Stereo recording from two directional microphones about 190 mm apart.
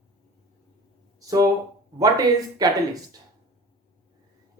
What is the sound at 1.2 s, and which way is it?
Speech, 20° right (ahead or behind).